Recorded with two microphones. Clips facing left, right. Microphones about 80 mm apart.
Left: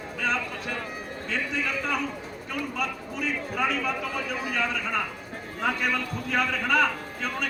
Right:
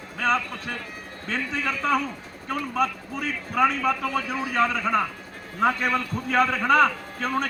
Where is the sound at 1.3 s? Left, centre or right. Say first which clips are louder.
Right 2 dB; right.